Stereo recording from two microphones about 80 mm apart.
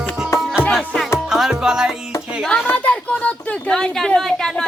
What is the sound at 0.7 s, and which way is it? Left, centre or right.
Music, centre.